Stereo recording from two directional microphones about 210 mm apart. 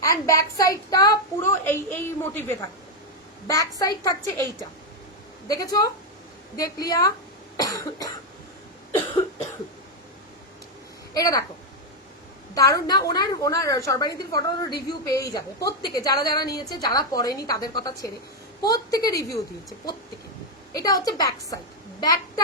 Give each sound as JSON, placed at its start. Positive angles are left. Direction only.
{"t": 0.0, "sound": "a woman's voice", "side_deg": 15}
{"t": 5.5, "sound": "a woman's voice", "side_deg": 15}
{"t": 7.5, "sound": "cough", "side_deg": 15}
{"t": 11.1, "sound": "speech", "side_deg": 15}
{"t": 12.5, "sound": "a woman's voice", "side_deg": 15}
{"t": 20.7, "sound": "a woman's voice", "side_deg": 15}